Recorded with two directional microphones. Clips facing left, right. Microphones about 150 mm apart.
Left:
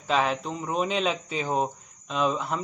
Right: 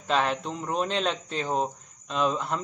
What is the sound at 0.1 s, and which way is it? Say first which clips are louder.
Speech: left 1 dB; centre (ahead or behind).